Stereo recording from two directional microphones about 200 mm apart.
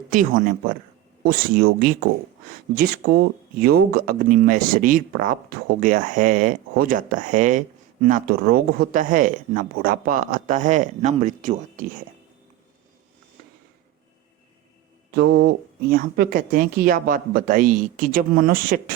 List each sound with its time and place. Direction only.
0.1 s speech: 45° right (ahead or behind)
15.1 s speech: 55° right (ahead or behind)